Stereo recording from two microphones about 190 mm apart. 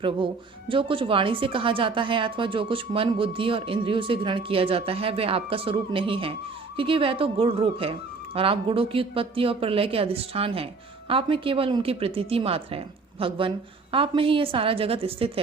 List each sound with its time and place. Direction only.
0.7 s a woman's voice: 30° right (ahead or behind)